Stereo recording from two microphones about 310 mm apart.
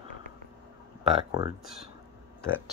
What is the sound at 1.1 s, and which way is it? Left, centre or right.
Speech, centre.